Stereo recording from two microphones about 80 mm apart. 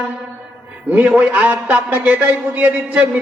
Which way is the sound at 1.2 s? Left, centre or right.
Centre.